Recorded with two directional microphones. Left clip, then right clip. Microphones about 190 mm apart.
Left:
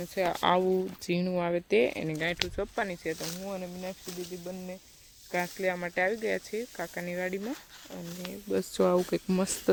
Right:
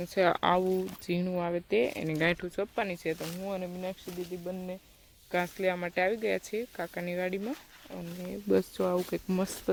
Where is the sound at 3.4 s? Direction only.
15° right (ahead or behind).